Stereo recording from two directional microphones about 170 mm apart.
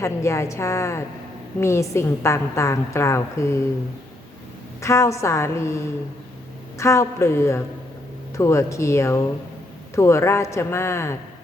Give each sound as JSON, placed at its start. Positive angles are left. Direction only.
{"t": 0.0, "sound": "a woman's voice", "side_deg": 15}
{"t": 4.8, "sound": "a woman's voice", "side_deg": 15}